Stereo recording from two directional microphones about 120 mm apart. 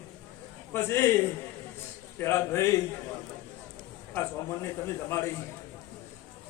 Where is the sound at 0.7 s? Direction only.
20° left (ahead or behind).